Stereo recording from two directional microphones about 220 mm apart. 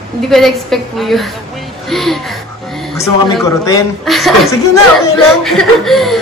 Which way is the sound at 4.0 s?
Centre (ahead or behind).